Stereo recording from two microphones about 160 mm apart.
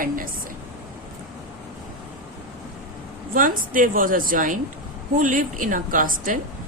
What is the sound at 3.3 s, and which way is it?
Speech, 60° right (ahead or behind).